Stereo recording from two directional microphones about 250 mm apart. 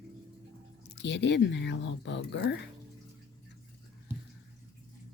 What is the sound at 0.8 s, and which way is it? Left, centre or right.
Speech, left.